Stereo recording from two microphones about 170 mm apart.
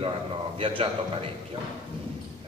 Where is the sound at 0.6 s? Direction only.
30° right (ahead or behind).